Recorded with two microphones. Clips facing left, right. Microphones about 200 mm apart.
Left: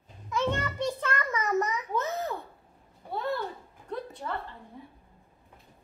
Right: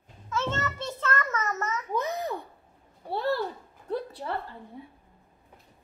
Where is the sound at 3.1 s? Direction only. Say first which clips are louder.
Right 4 dB; 30° right (ahead or behind).